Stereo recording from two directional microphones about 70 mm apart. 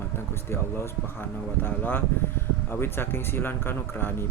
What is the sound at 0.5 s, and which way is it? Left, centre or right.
A man's voice, left.